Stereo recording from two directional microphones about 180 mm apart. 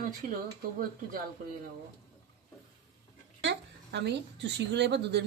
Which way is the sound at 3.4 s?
75° right (ahead or behind).